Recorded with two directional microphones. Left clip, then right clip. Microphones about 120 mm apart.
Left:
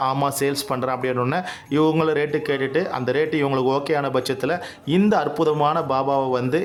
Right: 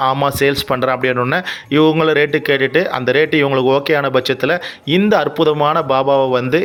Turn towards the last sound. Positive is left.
turn(degrees=-15)  # may be behind; listen again after turning